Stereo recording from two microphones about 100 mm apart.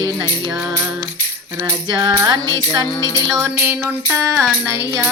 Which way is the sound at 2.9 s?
40° left (ahead or behind).